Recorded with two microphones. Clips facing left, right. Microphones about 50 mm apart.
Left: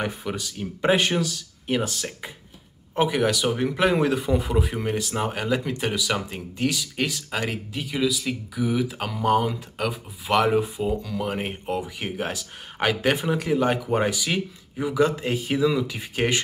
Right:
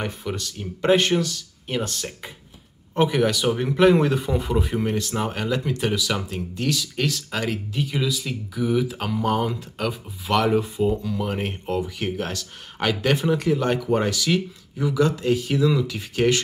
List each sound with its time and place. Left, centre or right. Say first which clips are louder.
0.0 s speech: even; centre
10.9 s speech: right 2 dB; centre